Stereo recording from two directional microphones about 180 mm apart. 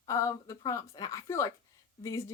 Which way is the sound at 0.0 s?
20° left (ahead or behind).